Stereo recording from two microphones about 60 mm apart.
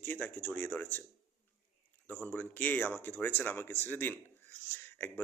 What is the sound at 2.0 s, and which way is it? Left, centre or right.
Speech, left.